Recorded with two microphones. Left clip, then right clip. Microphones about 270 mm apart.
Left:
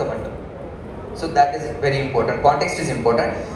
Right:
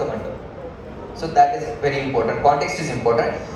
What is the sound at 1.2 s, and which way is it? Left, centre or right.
A man's voice, left.